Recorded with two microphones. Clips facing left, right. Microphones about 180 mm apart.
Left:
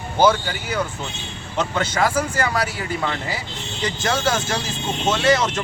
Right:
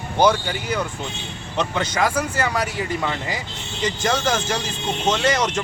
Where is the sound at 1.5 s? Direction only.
15° right (ahead or behind).